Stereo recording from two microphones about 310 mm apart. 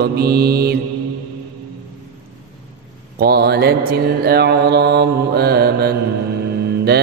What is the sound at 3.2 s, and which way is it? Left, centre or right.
Mantra, right.